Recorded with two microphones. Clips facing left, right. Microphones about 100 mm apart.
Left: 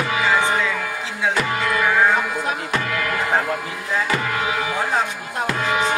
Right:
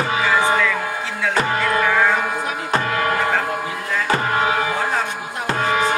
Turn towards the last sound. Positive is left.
turn(degrees=-45)  # may be behind; listen again after turning